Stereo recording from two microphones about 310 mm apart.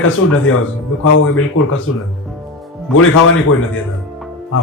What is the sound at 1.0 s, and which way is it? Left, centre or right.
Speech, left.